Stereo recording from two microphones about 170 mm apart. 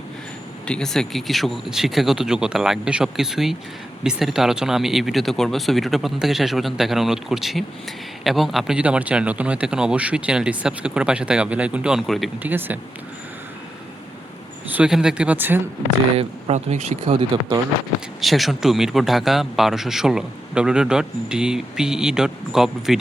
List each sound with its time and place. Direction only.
0.7 s speech: 5° left (ahead or behind)
12.4 s speech: 10° right (ahead or behind)
14.7 s speech: 5° right (ahead or behind)
16.1 s speech: 40° right (ahead or behind)
18.2 s speech: centre (ahead or behind)